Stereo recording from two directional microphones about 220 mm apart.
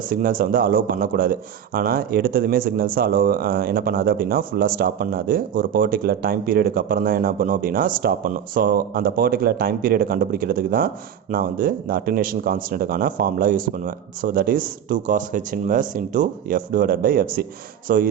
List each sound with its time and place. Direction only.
0.1 s speech: 40° right (ahead or behind)